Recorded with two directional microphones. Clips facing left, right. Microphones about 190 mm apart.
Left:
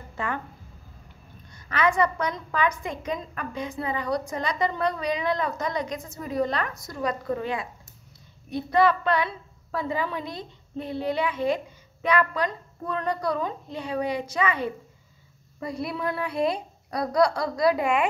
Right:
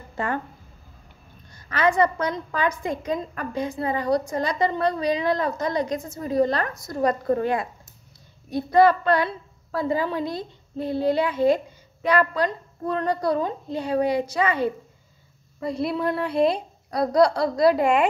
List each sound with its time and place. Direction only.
1.8 s a woman's voice: 30° right (ahead or behind)
15.7 s a woman's voice: 30° right (ahead or behind)